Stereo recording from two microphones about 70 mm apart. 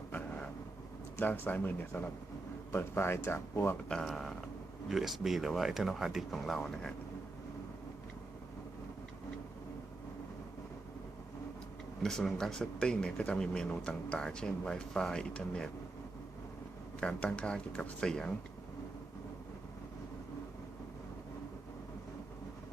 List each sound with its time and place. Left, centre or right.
1.1 s speech: left
3.8 s speech: centre
12.0 s speech: centre
17.0 s speech: centre